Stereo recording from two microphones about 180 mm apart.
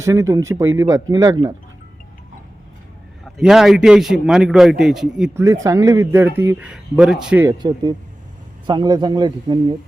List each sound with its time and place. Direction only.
0.0 s speech: 15° right (ahead or behind)
3.2 s a man's voice: centre (ahead or behind)
5.3 s speech: 15° right (ahead or behind)
7.4 s speech: 25° right (ahead or behind)